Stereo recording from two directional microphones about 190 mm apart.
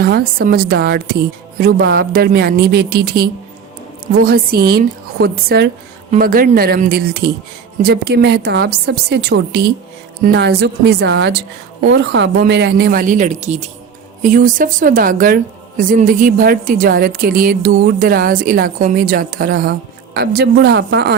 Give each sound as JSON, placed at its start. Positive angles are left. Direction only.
{"t": 0.0, "sound": "a woman's voice", "side_deg": -55}